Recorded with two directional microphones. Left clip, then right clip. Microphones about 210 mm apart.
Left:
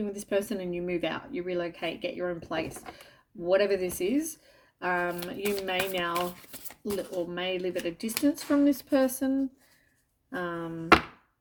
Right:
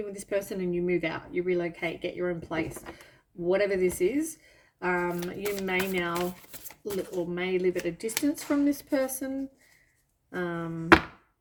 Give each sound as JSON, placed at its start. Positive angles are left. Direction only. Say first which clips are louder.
{"t": 0.0, "sound": "speech", "louder": "left 1 dB", "side_deg": 20}
{"t": 10.3, "sound": "speech", "louder": "right 1 dB", "side_deg": 25}